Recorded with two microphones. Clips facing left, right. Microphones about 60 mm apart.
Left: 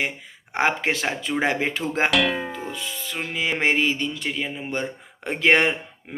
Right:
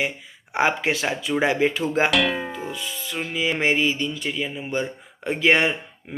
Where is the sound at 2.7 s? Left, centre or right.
Left.